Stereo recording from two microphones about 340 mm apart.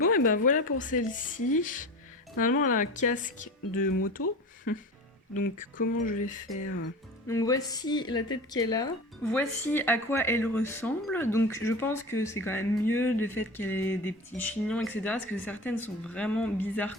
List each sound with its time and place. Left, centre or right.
0.0 s a woman's voice: left
5.5 s a woman's voice: left
7.3 s speech: centre